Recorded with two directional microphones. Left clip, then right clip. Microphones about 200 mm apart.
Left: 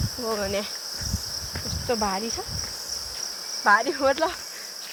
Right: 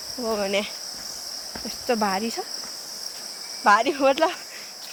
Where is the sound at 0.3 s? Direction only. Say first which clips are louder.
Right 3 dB; 30° right (ahead or behind).